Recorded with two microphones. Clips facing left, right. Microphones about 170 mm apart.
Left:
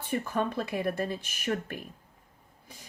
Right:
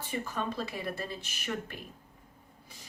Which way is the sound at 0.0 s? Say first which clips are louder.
Left 5 dB; 55° left (ahead or behind).